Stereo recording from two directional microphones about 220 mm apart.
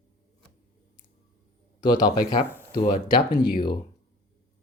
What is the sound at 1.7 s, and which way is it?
Speech, 20° left (ahead or behind).